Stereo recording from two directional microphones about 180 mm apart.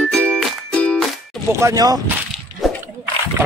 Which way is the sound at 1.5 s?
20° right (ahead or behind).